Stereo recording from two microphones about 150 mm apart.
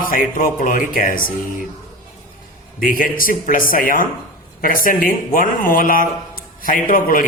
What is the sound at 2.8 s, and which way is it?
A man's voice, 65° left (ahead or behind).